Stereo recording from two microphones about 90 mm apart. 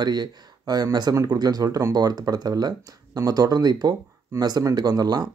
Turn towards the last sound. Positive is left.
turn(degrees=-45)  # may be behind; listen again after turning